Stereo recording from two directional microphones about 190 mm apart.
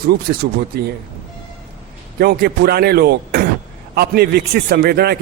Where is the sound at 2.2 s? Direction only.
55° right (ahead or behind).